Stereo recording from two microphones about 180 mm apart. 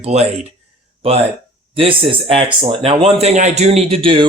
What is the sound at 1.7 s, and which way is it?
Speech, 30° right (ahead or behind).